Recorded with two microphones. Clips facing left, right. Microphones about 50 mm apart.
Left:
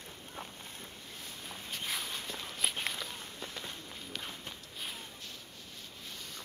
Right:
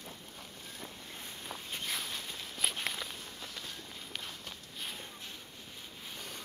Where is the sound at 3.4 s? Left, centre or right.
Centre.